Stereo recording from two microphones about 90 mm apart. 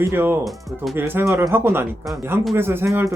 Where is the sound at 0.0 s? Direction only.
25° right (ahead or behind).